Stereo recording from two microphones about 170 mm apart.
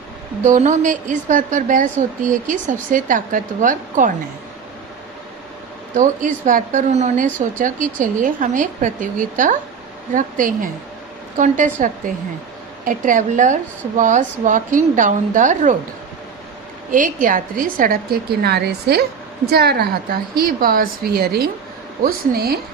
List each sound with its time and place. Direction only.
0.4 s a woman's voice: 45° right (ahead or behind)
5.9 s a woman's voice: 50° right (ahead or behind)
16.9 s a woman's voice: 50° right (ahead or behind)